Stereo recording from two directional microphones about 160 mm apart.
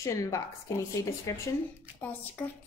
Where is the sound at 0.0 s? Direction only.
20° left (ahead or behind).